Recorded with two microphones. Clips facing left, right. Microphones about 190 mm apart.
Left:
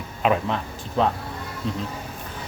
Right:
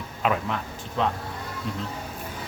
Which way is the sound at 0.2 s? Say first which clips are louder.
Left 4 dB; 25° left (ahead or behind).